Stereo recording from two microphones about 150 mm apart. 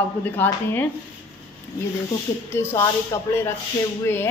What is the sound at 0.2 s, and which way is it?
Speech, 10° left (ahead or behind).